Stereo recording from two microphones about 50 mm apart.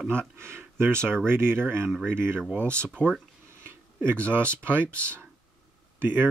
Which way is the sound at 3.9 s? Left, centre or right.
Right.